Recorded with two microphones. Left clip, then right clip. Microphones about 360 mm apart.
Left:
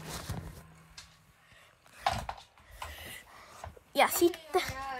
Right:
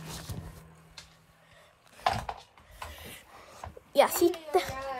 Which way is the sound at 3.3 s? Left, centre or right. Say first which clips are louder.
Right 1 dB; centre.